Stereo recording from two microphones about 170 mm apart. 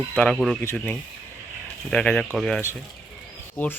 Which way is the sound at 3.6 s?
15° left (ahead or behind).